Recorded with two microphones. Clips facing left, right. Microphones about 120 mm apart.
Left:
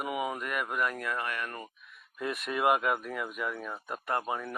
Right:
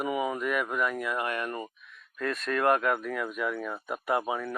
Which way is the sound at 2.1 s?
15° left (ahead or behind).